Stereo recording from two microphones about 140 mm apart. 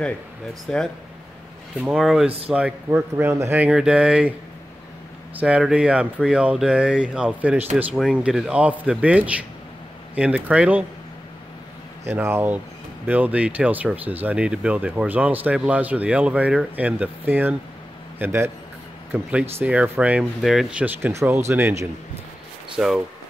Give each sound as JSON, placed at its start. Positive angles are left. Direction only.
{"t": 0.7, "sound": "speech", "side_deg": 5}
{"t": 2.2, "sound": "speech", "side_deg": -45}
{"t": 2.5, "sound": "speech", "side_deg": -10}
{"t": 5.3, "sound": "speech", "side_deg": -10}
{"t": 12.1, "sound": "speech", "side_deg": -15}
{"t": 20.8, "sound": "speech", "side_deg": -20}
{"t": 22.8, "sound": "speech", "side_deg": -5}